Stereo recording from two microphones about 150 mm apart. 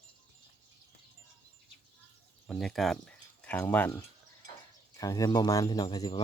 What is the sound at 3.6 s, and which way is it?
Speech, 10° left (ahead or behind).